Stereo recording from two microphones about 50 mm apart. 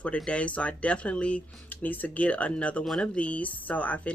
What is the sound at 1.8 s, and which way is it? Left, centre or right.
Speech, left.